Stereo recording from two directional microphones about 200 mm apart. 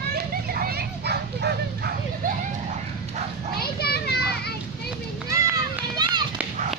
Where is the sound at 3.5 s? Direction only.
50° left (ahead or behind).